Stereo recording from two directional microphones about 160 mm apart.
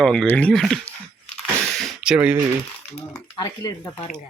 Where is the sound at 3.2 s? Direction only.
25° left (ahead or behind).